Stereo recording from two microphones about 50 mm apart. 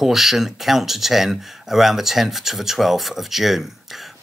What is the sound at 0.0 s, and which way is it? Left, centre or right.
Speech, centre.